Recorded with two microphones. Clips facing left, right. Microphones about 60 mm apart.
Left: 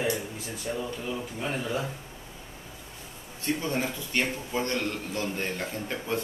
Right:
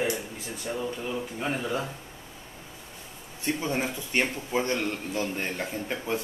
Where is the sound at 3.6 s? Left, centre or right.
Centre.